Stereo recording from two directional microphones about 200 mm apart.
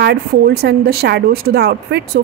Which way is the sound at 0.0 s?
55° right (ahead or behind).